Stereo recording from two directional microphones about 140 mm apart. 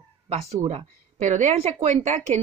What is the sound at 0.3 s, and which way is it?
A woman's voice, 50° right (ahead or behind).